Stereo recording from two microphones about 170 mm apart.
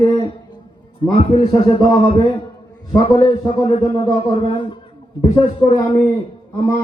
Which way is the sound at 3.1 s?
25° left (ahead or behind).